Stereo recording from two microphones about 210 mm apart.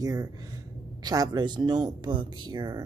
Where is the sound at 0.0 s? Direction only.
20° right (ahead or behind).